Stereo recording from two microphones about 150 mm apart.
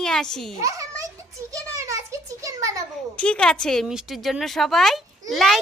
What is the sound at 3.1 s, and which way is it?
A woman's voice, 5° left (ahead or behind).